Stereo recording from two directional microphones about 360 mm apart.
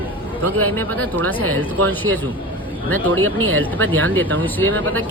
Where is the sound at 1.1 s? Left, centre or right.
Right.